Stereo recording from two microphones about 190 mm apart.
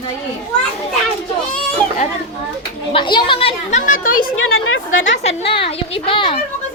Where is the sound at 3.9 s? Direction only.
45° left (ahead or behind).